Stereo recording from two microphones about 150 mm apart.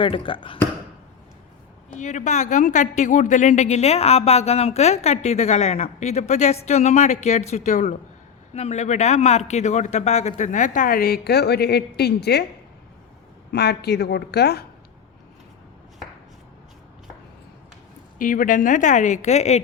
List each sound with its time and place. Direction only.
0.0 s speech: 35° left (ahead or behind)
2.0 s speech: 55° left (ahead or behind); by 12.5 s 90° left
13.5 s a woman's voice: 90° left
18.2 s speech: 65° left (ahead or behind); by 19.6 s 45° left (ahead or behind)